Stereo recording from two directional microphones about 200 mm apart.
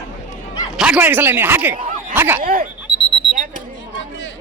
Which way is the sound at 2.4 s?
45° right (ahead or behind).